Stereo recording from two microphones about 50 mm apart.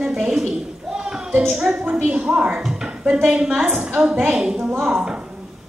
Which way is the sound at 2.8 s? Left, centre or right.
Right.